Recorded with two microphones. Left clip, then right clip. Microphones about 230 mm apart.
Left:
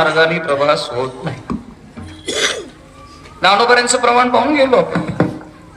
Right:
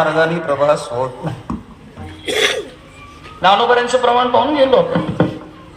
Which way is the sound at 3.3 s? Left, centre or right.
Right.